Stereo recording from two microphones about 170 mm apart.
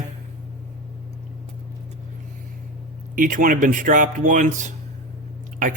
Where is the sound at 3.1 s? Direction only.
55° right (ahead or behind).